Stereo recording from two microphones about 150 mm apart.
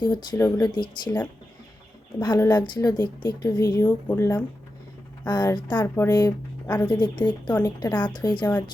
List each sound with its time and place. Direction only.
0.0 s a woman's voice: 25° left (ahead or behind)
2.4 s a woman's voice: 15° left (ahead or behind)
2.7 s a woman's voice: 30° left (ahead or behind)
5.2 s a woman's voice: 25° left (ahead or behind)